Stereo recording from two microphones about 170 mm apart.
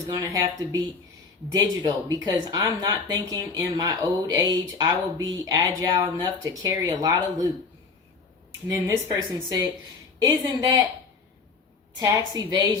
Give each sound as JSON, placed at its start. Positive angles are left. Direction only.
{"t": 0.2, "sound": "speech", "side_deg": -20}
{"t": 8.6, "sound": "speech", "side_deg": -20}
{"t": 10.2, "sound": "speech", "side_deg": -25}
{"t": 11.9, "sound": "speech", "side_deg": -20}